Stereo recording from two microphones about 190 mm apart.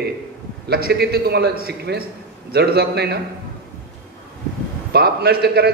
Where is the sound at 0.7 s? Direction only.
55° right (ahead or behind).